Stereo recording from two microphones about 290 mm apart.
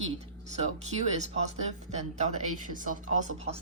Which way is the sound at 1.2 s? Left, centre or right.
Right.